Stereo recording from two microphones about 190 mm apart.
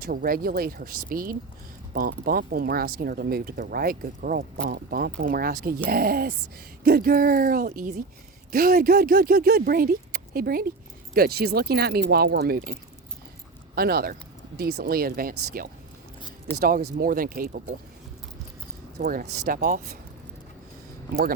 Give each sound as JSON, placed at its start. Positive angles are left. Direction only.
{"t": 0.0, "sound": "speech", "side_deg": -50}
{"t": 13.7, "sound": "speech", "side_deg": -55}
{"t": 18.9, "sound": "speech", "side_deg": -45}